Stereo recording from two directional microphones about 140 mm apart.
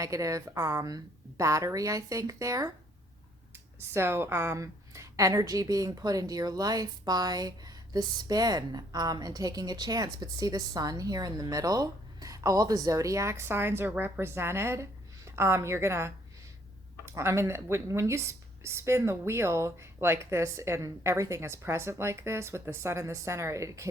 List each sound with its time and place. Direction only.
0.0 s a woman's voice: 25° right (ahead or behind)